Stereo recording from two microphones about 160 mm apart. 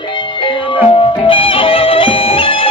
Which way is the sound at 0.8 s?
35° left (ahead or behind).